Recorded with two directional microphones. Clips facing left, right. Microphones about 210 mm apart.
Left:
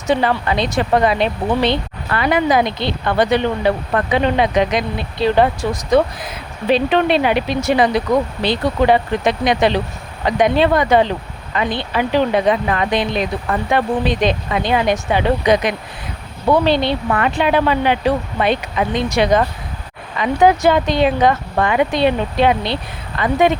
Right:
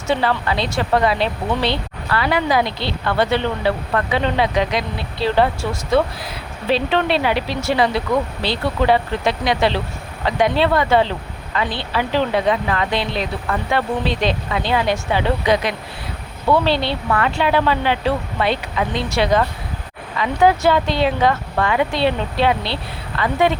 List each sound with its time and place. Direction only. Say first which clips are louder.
0.1 s speech: left 3 dB; 20° left (ahead or behind)